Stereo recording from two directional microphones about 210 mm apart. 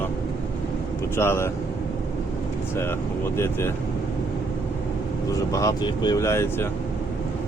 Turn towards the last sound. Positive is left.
turn(degrees=10)  # may be behind; listen again after turning